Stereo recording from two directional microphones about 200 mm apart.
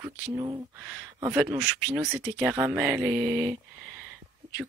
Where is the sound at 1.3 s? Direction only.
10° right (ahead or behind).